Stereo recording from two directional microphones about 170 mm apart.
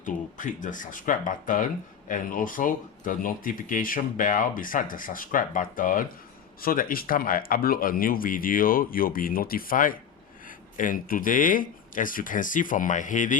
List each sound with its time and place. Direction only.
0.0 s speech: 50° left (ahead or behind)